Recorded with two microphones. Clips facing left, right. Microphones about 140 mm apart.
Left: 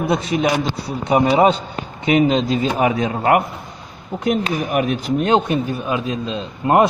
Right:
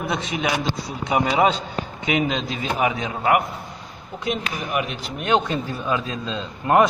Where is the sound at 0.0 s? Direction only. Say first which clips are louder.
Left 7 dB; 35° left (ahead or behind).